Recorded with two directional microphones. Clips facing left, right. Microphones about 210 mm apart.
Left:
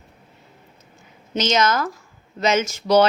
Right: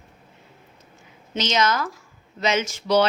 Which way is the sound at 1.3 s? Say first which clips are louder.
Left 3 dB; 45° left (ahead or behind).